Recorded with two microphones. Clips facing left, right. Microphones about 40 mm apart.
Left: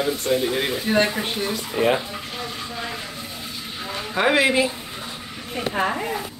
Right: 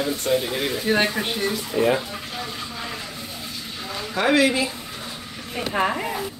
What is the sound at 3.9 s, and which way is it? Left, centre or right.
Speech, centre.